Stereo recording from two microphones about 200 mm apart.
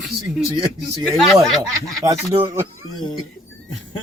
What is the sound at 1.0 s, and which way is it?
Speech, centre (ahead or behind).